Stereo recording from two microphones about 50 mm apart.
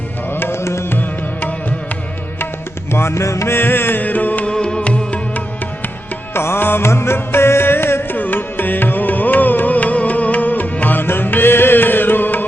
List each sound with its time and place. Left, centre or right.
0.3 s music: left
0.6 s music: left
0.9 s music: left
2.9 s music: left
3.5 s music: left
4.4 s music: centre
6.3 s music: left
8.1 s music: left